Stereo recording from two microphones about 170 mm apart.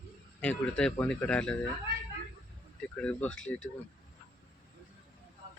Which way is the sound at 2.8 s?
5° left (ahead or behind).